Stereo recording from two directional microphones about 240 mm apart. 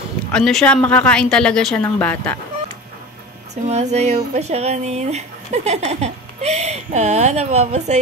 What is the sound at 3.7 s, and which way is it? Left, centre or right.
Speech, right.